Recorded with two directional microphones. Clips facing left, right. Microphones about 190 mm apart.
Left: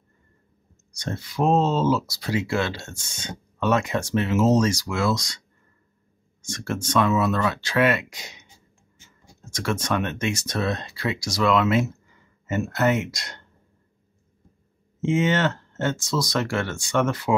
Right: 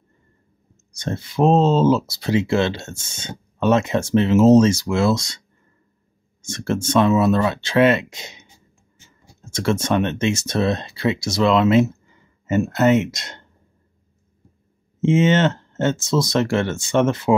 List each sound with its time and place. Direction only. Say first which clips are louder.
0.9 s speech: right 5 dB; 25° right (ahead or behind)
6.4 s speech: right 6 dB; 25° right (ahead or behind)
9.5 s speech: right 5 dB; 25° right (ahead or behind)
15.0 s speech: right 5 dB; 25° right (ahead or behind)